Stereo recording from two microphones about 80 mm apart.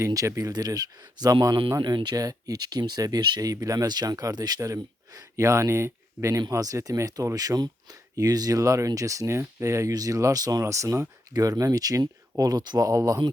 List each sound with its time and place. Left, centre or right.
0.0 s speech: right
1.8 s speech: right
3.5 s speech: right
4.6 s speech: right
11.3 s speech: right